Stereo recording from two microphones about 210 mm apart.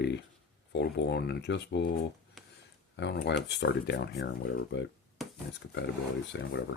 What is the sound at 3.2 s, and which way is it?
Speech, 55° left (ahead or behind).